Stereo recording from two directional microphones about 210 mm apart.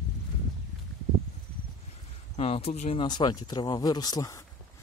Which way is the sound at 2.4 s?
30° left (ahead or behind).